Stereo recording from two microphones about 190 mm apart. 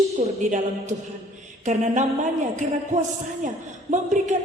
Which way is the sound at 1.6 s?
40° right (ahead or behind).